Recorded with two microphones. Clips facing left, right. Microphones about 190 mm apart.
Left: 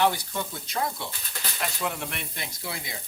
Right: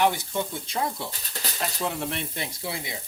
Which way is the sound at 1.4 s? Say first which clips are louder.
Right 1 dB; 30° right (ahead or behind).